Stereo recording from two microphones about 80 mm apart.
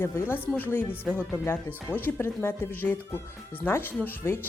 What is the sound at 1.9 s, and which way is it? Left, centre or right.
Speech, left.